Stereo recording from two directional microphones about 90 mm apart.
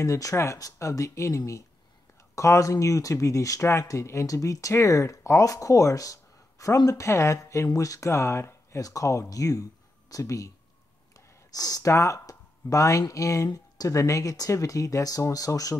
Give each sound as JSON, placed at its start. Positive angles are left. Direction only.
{"t": 0.0, "sound": "speech", "side_deg": 35}